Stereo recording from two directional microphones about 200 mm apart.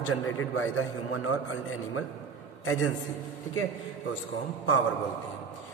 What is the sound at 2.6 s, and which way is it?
Speech, 90° left.